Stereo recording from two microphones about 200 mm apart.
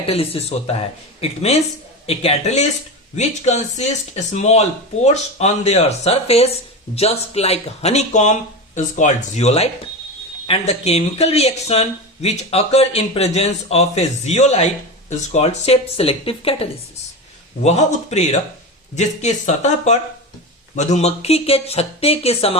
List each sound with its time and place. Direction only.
0.0 s speech: 30° left (ahead or behind)